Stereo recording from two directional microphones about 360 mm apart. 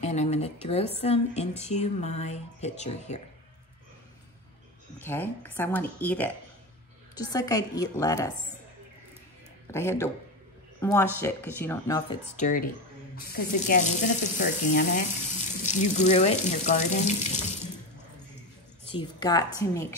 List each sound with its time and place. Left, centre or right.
0.0 s a woman's voice: centre
4.9 s a woman's voice: centre
9.7 s a woman's voice: centre
18.9 s a woman's voice: centre